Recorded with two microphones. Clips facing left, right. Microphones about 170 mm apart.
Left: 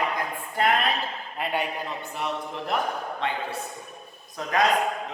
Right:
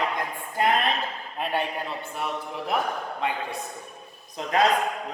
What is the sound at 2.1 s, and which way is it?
Speech, centre (ahead or behind).